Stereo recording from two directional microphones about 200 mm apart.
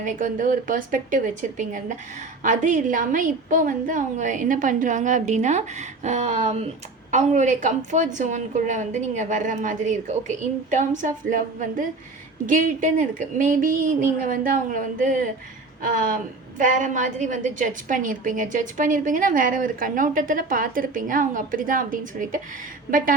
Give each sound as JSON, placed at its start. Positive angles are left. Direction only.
{"t": 0.0, "sound": "a woman's voice", "side_deg": -40}